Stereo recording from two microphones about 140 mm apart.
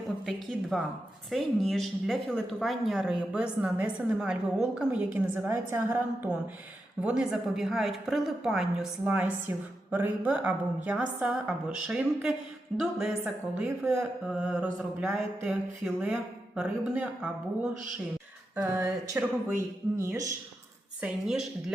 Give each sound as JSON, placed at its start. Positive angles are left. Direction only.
{"t": 0.3, "sound": "a woman's voice", "side_deg": 0}
{"t": 7.0, "sound": "a woman's voice", "side_deg": -5}
{"t": 21.0, "sound": "a woman's voice", "side_deg": -5}